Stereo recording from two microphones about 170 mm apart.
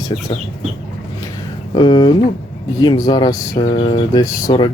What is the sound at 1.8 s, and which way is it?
Speech, 25° left (ahead or behind).